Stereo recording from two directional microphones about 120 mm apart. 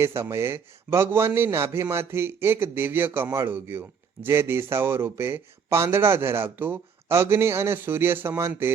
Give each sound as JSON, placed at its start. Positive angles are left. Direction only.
{"t": 0.0, "sound": "a man's voice", "side_deg": -20}